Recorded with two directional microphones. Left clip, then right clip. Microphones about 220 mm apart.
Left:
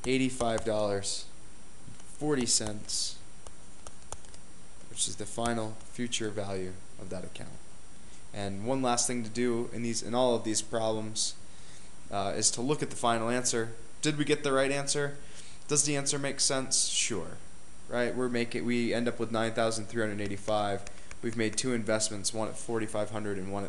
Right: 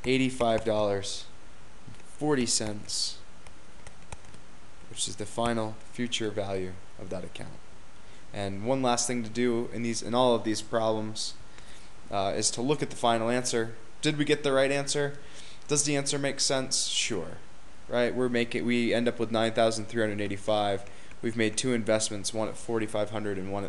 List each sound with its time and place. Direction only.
0.0 s speech: 20° right (ahead or behind)
4.9 s speech: 20° right (ahead or behind)